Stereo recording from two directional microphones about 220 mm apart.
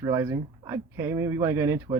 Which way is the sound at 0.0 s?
15° right (ahead or behind).